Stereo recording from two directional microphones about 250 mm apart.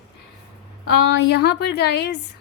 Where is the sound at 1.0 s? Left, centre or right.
Left.